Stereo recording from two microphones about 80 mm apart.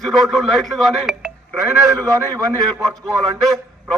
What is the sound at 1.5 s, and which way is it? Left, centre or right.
A man's voice, right.